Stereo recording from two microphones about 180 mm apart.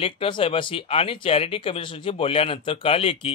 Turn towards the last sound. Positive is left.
turn(degrees=30)  # may be behind; listen again after turning